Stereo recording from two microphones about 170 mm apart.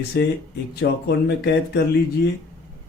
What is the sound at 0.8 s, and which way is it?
Speech, 80° left.